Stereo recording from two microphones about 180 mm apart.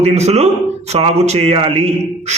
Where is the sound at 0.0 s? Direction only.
35° right (ahead or behind).